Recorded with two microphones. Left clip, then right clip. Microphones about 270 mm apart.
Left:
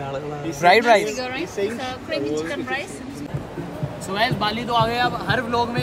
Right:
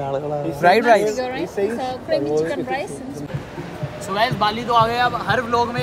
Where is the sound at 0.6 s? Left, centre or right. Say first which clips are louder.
Right 1 dB; centre.